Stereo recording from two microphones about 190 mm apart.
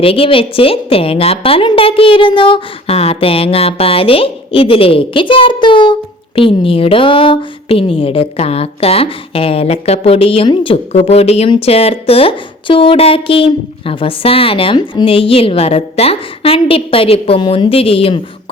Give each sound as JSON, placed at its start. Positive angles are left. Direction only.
{"t": 0.0, "sound": "a woman's voice", "side_deg": 30}